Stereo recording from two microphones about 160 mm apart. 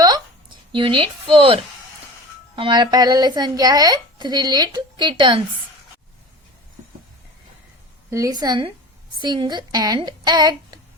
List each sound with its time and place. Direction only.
0.0 s a sound: 30° right (ahead or behind)
2.6 s speech: 30° right (ahead or behind)
8.1 s speech: 20° right (ahead or behind)